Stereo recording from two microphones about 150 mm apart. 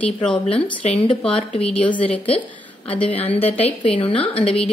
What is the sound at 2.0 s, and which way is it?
Speech, 40° left (ahead or behind).